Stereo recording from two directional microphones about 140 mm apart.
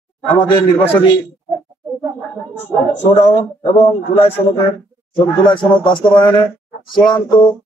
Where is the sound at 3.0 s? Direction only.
55° left (ahead or behind).